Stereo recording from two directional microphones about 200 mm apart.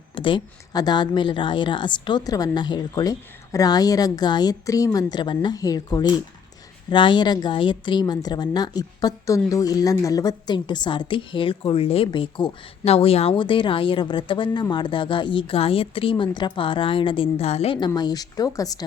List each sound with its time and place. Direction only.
0.1 s a woman's voice: 25° left (ahead or behind)